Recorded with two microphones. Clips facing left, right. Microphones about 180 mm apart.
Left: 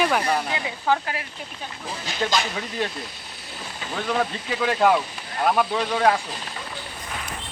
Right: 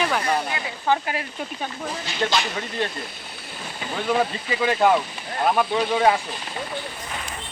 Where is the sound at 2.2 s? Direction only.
5° left (ahead or behind).